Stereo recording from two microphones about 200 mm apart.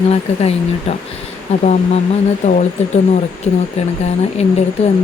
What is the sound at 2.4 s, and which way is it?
Speech, 35° left (ahead or behind).